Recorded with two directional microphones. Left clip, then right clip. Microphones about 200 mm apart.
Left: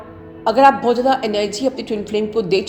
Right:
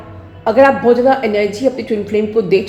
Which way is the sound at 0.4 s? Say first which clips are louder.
Right 3 dB; 30° left (ahead or behind).